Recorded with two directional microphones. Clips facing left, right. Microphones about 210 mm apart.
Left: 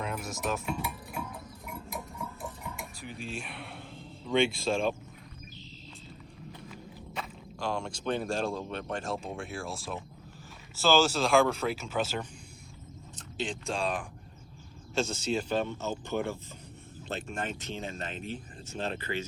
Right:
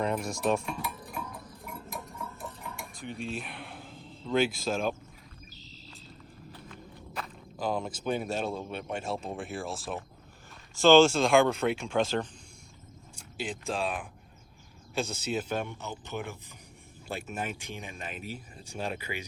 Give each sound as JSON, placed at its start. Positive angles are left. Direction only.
{"t": 0.0, "sound": "speech", "side_deg": 0}
{"t": 1.1, "sound": "a sound", "side_deg": 10}
{"t": 3.0, "sound": "speech", "side_deg": 0}
{"t": 6.7, "sound": "walk", "side_deg": 0}
{"t": 8.9, "sound": "speech", "side_deg": -5}
{"t": 13.1, "sound": "speech", "side_deg": -10}
{"t": 15.3, "sound": "speech", "side_deg": -5}